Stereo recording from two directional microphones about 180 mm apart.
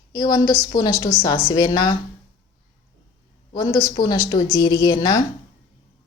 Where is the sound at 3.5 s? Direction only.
20° left (ahead or behind).